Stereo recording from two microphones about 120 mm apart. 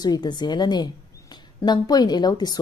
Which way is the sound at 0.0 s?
35° left (ahead or behind).